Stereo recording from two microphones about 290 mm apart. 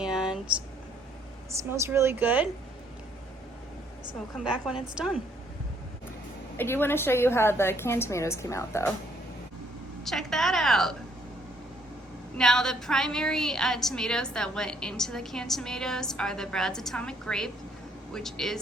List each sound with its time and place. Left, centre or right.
0.0 s a sound: centre
1.7 s a woman's voice: centre
4.4 s a woman's voice: centre
6.6 s a woman's voice: centre
10.0 s a sound: centre
12.4 s a woman's voice: centre